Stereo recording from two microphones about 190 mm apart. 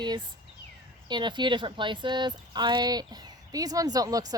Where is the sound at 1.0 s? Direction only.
25° right (ahead or behind).